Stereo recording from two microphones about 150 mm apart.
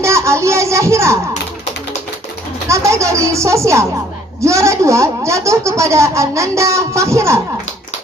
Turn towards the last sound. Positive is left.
turn(degrees=-20)  # may be behind; listen again after turning